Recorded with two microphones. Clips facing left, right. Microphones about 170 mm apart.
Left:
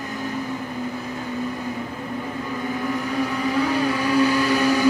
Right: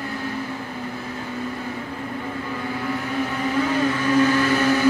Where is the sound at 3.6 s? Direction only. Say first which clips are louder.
Right 1 dB; 10° left (ahead or behind).